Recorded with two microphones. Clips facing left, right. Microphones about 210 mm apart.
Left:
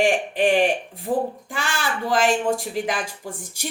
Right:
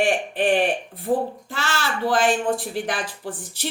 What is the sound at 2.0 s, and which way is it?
Speech, 45° left (ahead or behind).